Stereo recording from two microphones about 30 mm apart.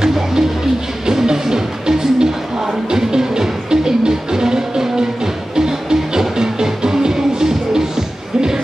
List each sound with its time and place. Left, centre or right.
0.0 s music: centre